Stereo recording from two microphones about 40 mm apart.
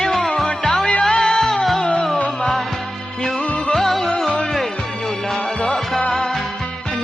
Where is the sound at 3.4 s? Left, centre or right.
Left.